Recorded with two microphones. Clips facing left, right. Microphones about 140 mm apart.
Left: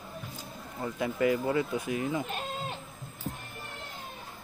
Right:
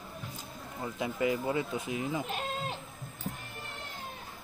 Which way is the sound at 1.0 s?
20° right (ahead or behind).